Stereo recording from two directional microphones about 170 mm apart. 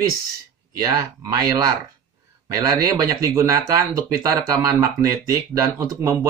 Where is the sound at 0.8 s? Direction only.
20° right (ahead or behind).